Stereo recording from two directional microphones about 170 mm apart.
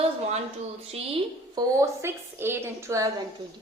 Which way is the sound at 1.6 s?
15° right (ahead or behind).